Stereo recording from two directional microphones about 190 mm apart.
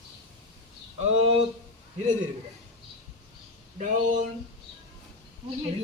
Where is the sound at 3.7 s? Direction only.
40° right (ahead or behind).